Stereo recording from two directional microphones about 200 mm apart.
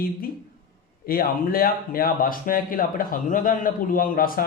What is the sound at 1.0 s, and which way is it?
Speech, 45° left (ahead or behind).